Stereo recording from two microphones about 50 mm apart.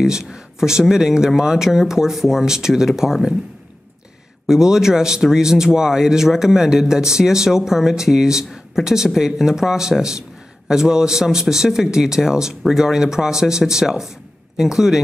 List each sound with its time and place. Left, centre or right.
0.0 s speech: centre
4.5 s speech: centre